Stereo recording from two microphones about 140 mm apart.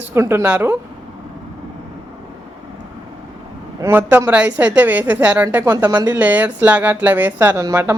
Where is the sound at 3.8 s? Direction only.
15° right (ahead or behind).